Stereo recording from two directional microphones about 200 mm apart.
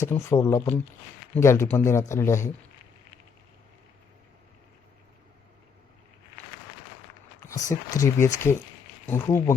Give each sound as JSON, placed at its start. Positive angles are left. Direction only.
{"t": 0.0, "sound": "speech", "side_deg": 15}
{"t": 7.4, "sound": "speech", "side_deg": 15}